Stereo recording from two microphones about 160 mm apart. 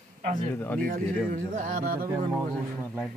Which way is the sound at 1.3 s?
55° right (ahead or behind).